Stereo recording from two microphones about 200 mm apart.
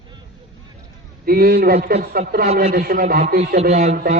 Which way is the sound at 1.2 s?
50° right (ahead or behind).